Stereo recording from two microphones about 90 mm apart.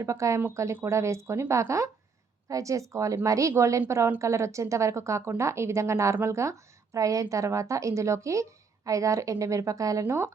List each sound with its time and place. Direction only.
0.0 s a woman's voice: 35° right (ahead or behind)